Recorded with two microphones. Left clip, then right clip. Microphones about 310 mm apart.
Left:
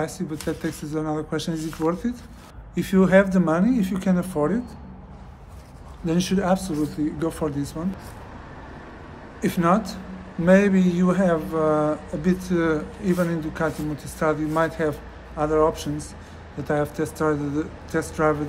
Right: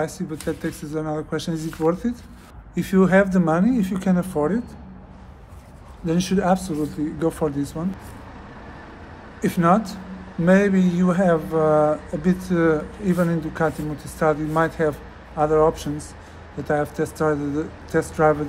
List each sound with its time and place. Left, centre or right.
0.0 s speech: centre
6.0 s speech: centre
9.4 s speech: centre